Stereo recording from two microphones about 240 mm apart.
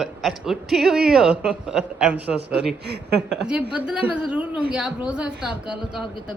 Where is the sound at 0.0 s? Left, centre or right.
Centre.